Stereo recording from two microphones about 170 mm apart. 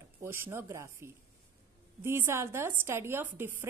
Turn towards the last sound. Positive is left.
turn(degrees=-15)  # may be behind; listen again after turning